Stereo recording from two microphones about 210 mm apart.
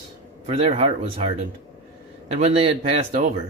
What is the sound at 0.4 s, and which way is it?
Speech, 30° right (ahead or behind).